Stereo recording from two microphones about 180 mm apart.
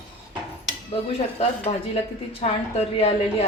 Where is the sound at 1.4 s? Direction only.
35° left (ahead or behind).